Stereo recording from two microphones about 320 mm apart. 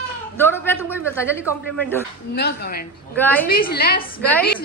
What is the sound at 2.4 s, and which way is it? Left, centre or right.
Speech, left.